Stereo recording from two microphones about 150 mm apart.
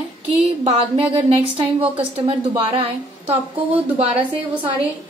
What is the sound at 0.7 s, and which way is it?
A woman's voice, 40° right (ahead or behind).